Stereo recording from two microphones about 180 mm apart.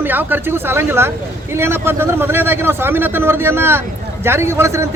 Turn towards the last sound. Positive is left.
turn(degrees=-15)  # may be behind; listen again after turning